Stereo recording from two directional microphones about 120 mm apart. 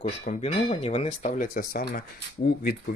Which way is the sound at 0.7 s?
60° left (ahead or behind).